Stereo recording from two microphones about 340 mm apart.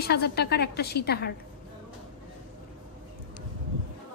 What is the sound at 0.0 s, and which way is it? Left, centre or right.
A woman's voice, left.